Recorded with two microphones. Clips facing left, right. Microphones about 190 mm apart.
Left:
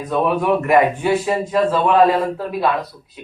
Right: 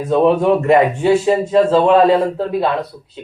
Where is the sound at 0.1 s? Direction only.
25° right (ahead or behind).